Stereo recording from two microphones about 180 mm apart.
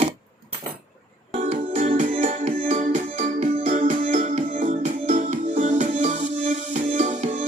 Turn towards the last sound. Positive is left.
turn(degrees=-40)  # may be behind; listen again after turning